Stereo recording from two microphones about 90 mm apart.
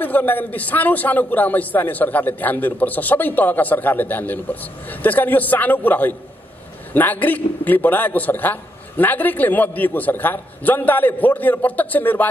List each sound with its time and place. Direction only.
0.0 s a man's voice: 20° left (ahead or behind)